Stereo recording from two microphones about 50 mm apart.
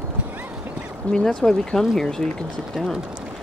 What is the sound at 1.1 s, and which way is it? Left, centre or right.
Speech, centre.